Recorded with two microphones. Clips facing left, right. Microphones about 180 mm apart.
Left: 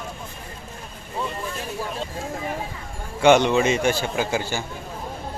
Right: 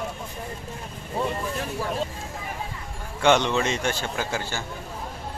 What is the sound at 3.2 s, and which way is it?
Speech, 10° left (ahead or behind).